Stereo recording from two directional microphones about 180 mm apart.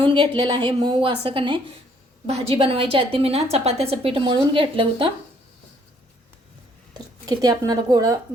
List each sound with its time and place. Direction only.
0.0 s a woman's voice: 25° right (ahead or behind)
6.9 s speech: 20° right (ahead or behind)